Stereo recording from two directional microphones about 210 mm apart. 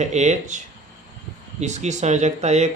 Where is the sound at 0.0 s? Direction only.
35° right (ahead or behind).